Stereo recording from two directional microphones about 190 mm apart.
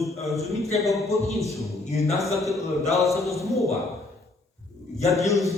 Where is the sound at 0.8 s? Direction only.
15° left (ahead or behind).